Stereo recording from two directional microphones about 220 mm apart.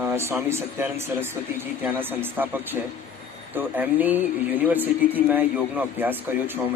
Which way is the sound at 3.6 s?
10° right (ahead or behind).